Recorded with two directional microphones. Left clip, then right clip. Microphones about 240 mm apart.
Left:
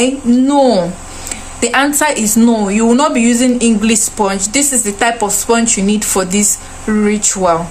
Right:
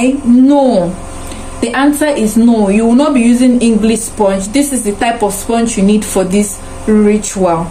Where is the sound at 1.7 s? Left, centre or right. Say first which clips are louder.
Right 1 dB; left.